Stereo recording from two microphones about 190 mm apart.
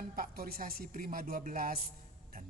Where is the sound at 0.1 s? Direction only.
50° right (ahead or behind).